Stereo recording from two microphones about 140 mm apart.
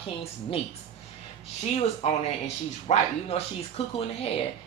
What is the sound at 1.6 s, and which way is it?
A man's voice, 50° left (ahead or behind).